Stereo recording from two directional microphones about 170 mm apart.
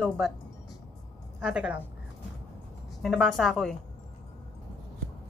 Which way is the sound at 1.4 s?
5° right (ahead or behind).